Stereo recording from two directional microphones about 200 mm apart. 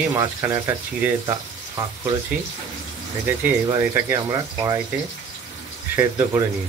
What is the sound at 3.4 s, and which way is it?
Speech, 15° right (ahead or behind).